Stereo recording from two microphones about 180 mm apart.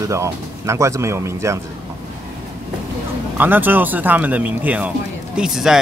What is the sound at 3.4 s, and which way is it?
A man's voice, 10° right (ahead or behind).